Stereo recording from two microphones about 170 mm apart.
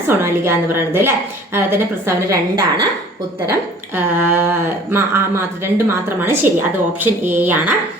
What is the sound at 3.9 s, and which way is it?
A woman's voice, 10° right (ahead or behind).